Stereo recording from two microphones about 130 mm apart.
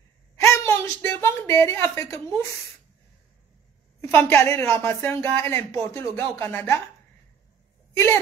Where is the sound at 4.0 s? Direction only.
15° left (ahead or behind).